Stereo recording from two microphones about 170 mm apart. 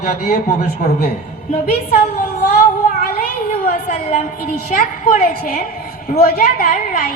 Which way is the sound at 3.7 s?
45° left (ahead or behind).